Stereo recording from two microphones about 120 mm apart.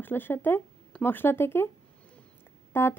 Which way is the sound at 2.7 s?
20° left (ahead or behind).